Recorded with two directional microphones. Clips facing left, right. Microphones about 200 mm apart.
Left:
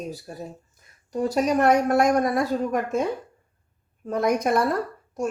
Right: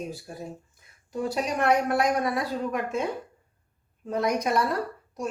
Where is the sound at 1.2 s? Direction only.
45° left (ahead or behind).